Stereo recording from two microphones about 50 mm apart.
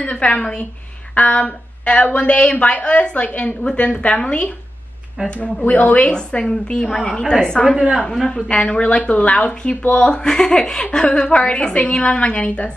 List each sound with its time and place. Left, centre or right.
0.0 s a woman's voice: left
5.7 s a woman's voice: left
6.0 s a woman's voice: centre
7.7 s a woman's voice: centre
8.0 s a woman's voice: centre